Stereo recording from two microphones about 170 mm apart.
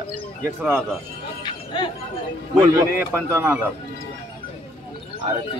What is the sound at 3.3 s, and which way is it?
Speech, 15° right (ahead or behind).